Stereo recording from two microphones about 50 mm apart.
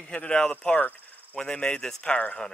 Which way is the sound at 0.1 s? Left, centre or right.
Left.